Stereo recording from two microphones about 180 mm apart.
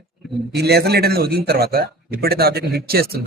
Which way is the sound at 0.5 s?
65° right (ahead or behind).